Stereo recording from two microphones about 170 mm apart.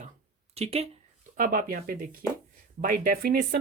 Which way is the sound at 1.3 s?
55° right (ahead or behind).